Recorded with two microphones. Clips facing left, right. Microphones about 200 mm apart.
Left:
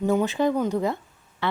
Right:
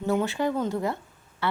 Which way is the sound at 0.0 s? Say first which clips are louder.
Left 3 dB; 15° left (ahead or behind).